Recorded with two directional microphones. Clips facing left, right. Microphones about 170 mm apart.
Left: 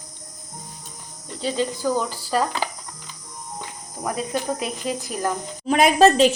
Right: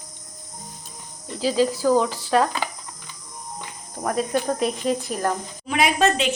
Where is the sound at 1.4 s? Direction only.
5° right (ahead or behind).